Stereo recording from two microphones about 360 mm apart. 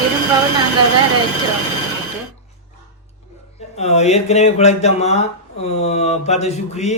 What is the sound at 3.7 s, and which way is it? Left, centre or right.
Speech, centre.